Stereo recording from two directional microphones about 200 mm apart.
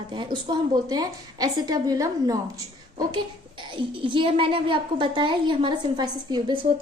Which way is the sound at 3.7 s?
25° right (ahead or behind).